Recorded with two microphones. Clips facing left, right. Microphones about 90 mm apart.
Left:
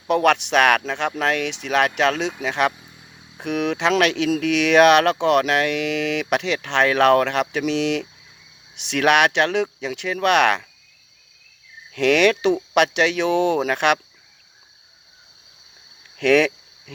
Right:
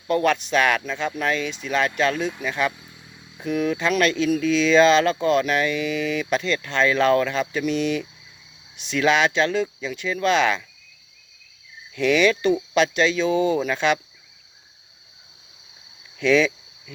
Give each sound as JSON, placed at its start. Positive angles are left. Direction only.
{"t": 0.1, "sound": "speech", "side_deg": 80}
{"t": 11.9, "sound": "speech", "side_deg": 65}
{"t": 16.1, "sound": "cricket", "side_deg": 65}